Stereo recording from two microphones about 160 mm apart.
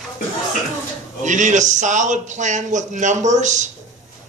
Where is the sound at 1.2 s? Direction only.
50° right (ahead or behind).